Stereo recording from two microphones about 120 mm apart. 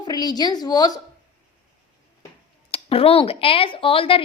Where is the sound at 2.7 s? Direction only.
50° left (ahead or behind).